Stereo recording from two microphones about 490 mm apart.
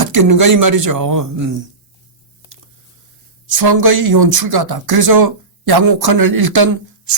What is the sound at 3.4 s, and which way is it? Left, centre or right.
Speech, right.